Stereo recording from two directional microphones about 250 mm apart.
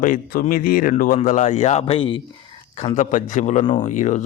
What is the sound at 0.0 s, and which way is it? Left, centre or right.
Speech, left.